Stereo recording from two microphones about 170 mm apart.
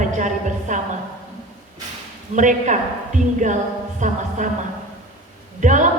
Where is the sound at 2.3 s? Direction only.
45° right (ahead or behind).